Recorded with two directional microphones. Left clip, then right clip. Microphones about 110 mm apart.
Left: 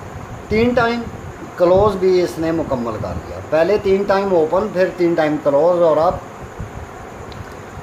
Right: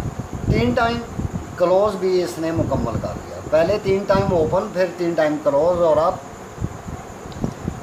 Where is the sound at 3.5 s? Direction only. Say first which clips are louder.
Left 3 dB; 90° left.